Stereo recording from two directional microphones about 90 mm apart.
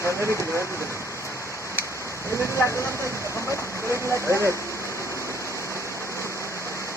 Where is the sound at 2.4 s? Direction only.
30° left (ahead or behind).